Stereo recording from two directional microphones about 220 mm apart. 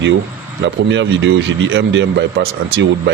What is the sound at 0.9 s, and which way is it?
Speech, 55° right (ahead or behind).